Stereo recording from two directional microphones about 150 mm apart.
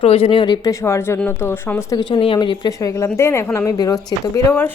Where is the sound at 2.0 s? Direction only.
35° left (ahead or behind).